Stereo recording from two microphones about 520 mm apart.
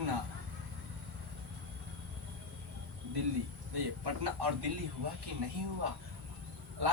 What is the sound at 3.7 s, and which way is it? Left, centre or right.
Speech, right.